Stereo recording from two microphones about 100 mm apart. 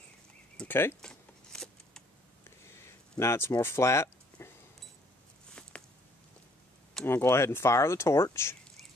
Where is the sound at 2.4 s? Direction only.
25° left (ahead or behind).